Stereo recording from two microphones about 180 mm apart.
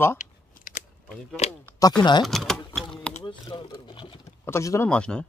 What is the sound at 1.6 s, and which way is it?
Speech, 20° left (ahead or behind).